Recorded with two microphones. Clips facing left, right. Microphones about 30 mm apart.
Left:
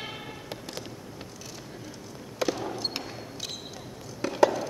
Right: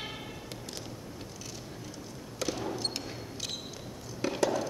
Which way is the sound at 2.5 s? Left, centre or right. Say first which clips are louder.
Left 2 dB; centre.